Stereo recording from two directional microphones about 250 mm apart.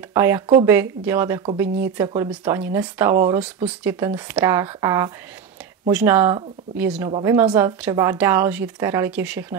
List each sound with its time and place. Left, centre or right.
0.1 s a woman's voice: centre
7.1 s a woman's voice: right
7.3 s a woman's voice: centre